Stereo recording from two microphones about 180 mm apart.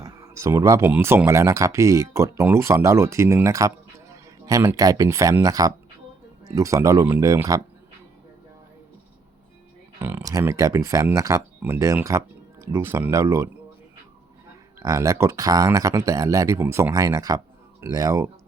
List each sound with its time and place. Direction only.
0.0 s speech: 20° right (ahead or behind)
10.0 s speech: 15° right (ahead or behind)
14.8 s speech: 20° right (ahead or behind)